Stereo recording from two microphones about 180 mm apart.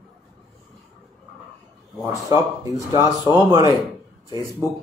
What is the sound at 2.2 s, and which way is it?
Speech, 20° right (ahead or behind).